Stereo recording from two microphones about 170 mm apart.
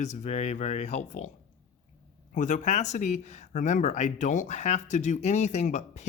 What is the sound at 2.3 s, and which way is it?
Speech, 45° left (ahead or behind).